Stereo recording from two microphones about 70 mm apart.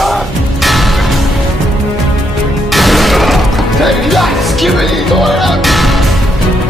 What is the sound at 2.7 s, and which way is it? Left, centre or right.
Music, centre.